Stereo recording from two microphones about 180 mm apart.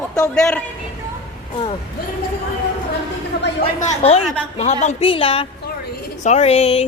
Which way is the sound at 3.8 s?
35° left (ahead or behind).